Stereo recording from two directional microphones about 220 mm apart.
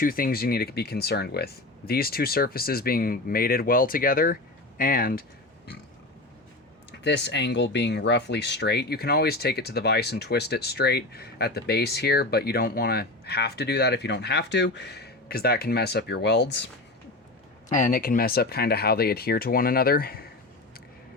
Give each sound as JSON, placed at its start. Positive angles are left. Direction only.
{"t": 0.0, "sound": "speech", "side_deg": 40}
{"t": 7.0, "sound": "speech", "side_deg": 50}
{"t": 17.7, "sound": "speech", "side_deg": 35}